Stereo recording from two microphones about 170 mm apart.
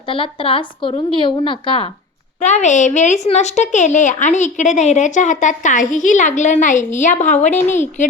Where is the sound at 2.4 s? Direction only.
45° left (ahead or behind).